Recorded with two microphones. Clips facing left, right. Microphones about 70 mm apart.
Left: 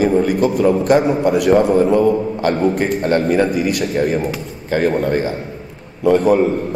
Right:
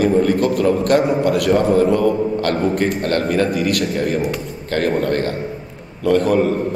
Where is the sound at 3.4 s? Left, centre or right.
Centre.